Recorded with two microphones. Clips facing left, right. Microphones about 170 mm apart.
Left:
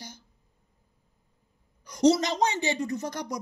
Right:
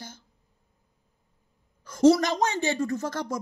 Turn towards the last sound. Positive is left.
turn(degrees=15)  # may be behind; listen again after turning